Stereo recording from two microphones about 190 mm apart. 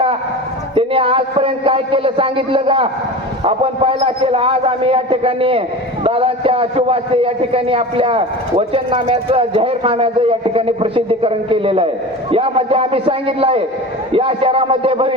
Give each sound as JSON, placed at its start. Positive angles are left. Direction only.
{"t": 0.8, "sound": "a man's voice", "side_deg": -30}